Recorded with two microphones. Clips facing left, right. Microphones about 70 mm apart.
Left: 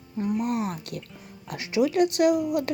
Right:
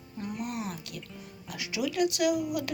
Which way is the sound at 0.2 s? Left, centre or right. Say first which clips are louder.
Left 9 dB; left.